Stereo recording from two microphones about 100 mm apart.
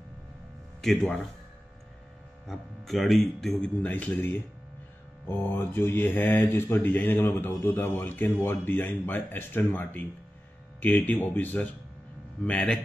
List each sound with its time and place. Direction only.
0.8 s a man's voice: 5° left (ahead or behind)
2.4 s a man's voice: centre (ahead or behind)
3.8 s speech: 15° left (ahead or behind)